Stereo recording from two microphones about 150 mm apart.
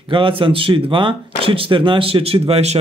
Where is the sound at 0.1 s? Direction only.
35° right (ahead or behind).